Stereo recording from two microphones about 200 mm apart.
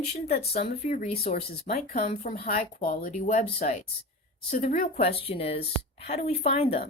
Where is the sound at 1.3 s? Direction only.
45° left (ahead or behind).